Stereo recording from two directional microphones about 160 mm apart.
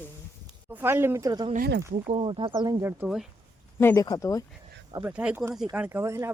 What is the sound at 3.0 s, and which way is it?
Speech, 5° right (ahead or behind).